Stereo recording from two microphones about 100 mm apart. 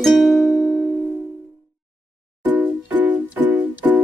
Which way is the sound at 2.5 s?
20° right (ahead or behind).